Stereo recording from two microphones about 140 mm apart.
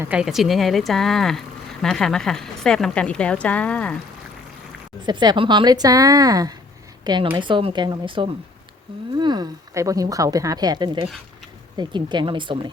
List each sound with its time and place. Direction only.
0.0 s speech: 10° right (ahead or behind); by 3.9 s 10° left (ahead or behind)
5.0 s a woman's voice: 30° right (ahead or behind)